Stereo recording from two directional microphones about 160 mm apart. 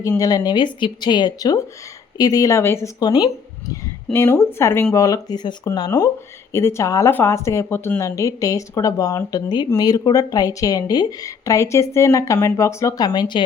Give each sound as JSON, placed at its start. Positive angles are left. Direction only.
{"t": 0.2, "sound": "speech", "side_deg": 25}
{"t": 4.1, "sound": "speech", "side_deg": 15}